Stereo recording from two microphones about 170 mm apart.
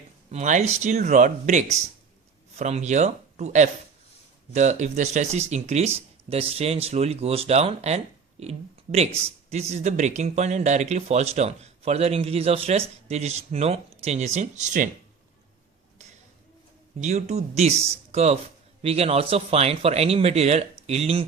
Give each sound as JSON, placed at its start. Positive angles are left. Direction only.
{"t": 0.3, "sound": "speech", "side_deg": -45}
{"t": 17.0, "sound": "speech", "side_deg": -40}